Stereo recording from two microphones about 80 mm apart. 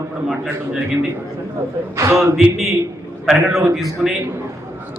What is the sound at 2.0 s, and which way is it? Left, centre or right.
Speech, right.